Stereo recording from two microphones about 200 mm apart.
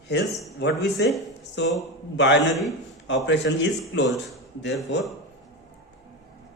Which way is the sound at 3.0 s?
65° left (ahead or behind).